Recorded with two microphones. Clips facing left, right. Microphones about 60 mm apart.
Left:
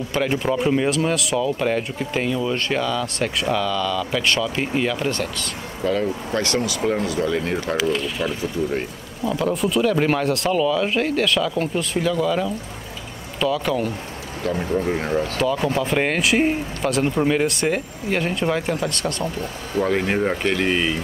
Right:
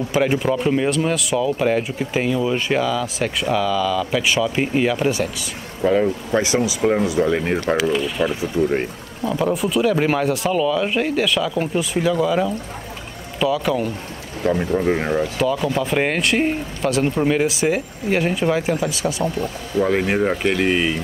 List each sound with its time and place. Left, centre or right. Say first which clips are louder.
0.1 s speech: right 2 dB; centre
7.7 s speech: right 2 dB; centre
9.4 s speech: right 1 dB; centre
14.4 s speech: right 4 dB; centre
15.6 s speech: right 1 dB; centre